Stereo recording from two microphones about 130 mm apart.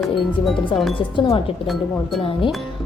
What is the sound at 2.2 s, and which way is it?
Speech, 40° left (ahead or behind).